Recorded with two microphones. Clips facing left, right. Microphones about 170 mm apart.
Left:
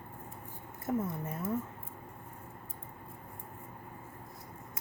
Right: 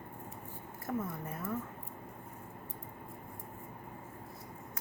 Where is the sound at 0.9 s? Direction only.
25° left (ahead or behind).